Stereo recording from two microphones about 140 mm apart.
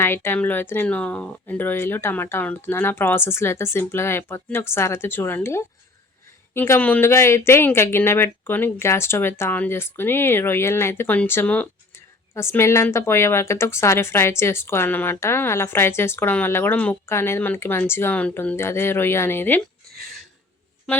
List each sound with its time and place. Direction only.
0.0 s a woman's voice: 15° left (ahead or behind)